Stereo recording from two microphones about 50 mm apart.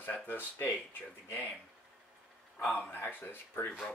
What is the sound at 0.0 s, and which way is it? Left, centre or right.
Speech, left.